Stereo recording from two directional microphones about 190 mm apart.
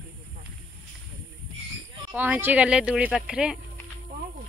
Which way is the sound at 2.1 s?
10° right (ahead or behind).